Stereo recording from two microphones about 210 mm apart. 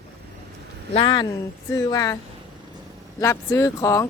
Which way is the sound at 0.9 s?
20° left (ahead or behind).